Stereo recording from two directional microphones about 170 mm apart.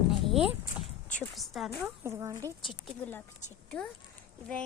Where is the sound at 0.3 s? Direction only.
5° right (ahead or behind).